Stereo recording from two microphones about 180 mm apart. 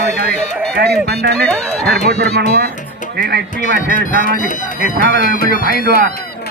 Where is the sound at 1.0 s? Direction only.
60° right (ahead or behind).